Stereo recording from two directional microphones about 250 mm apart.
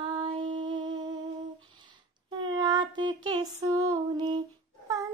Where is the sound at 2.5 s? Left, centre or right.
Centre.